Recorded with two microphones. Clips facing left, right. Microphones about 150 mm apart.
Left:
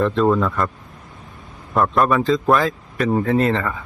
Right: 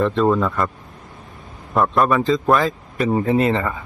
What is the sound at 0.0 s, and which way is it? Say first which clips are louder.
Speech: even; centre (ahead or behind).